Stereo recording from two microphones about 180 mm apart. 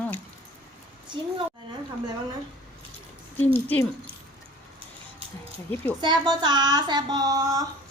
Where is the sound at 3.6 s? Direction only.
10° left (ahead or behind).